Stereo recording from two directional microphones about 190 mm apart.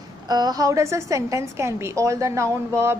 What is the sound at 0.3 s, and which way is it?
A woman's voice, 20° right (ahead or behind).